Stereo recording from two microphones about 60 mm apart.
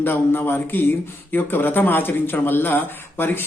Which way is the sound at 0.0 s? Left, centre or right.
Left.